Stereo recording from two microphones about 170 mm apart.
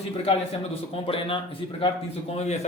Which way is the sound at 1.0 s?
30° left (ahead or behind).